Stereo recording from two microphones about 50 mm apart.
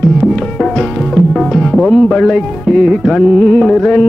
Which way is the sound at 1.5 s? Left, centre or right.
Centre.